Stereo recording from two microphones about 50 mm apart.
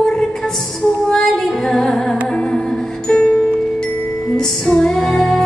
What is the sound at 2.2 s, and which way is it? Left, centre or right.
Music, centre.